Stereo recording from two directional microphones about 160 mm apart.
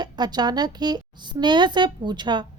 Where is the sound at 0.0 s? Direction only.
25° right (ahead or behind).